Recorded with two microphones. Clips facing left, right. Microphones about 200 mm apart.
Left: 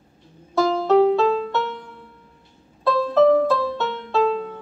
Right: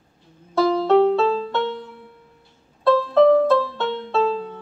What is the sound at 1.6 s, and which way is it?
Music, 30° right (ahead or behind).